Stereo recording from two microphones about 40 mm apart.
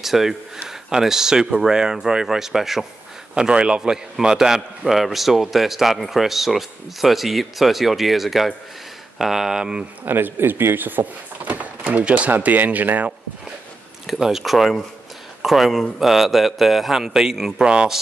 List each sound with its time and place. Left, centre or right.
0.0 s speech: centre
3.3 s a man's voice: right
4.8 s speech: centre
10.0 s speech: right
12.3 s speech: right
14.0 s speech: centre
17.5 s a man's voice: centre